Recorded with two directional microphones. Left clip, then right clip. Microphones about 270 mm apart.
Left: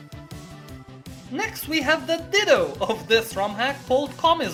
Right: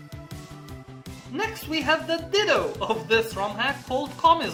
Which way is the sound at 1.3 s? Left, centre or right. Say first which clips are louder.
Left 2 dB; left.